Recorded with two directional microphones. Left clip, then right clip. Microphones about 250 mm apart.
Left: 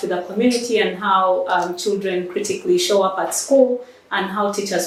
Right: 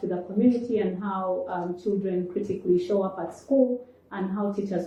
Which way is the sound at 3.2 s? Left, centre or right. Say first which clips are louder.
Left 9 dB; centre.